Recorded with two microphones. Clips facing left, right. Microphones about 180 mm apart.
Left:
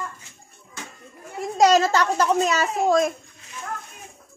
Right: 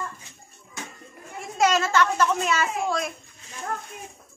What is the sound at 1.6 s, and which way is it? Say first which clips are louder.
A child's voice: left 4 dB; 35° left (ahead or behind).